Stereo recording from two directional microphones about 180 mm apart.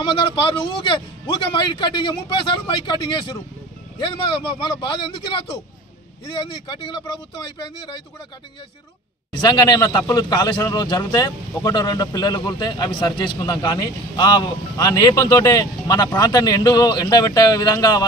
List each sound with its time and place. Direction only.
0.0 s a man's voice: 25° left (ahead or behind)
9.4 s a man's voice: 20° left (ahead or behind)